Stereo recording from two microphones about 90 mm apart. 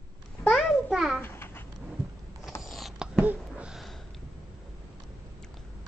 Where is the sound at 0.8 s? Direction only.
5° right (ahead or behind).